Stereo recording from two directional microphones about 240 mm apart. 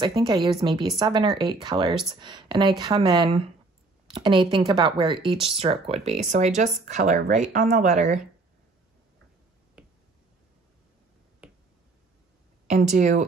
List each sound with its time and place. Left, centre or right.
0.0 s a woman's voice: centre
9.8 s finger snapping: centre
11.4 s finger snapping: centre
12.9 s speech: right